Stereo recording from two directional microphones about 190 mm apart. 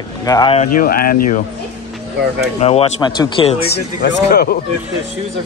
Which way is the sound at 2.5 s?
35° left (ahead or behind).